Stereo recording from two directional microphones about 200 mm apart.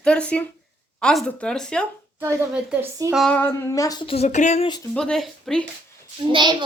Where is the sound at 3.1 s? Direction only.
5° left (ahead or behind); by 4.7 s 35° left (ahead or behind).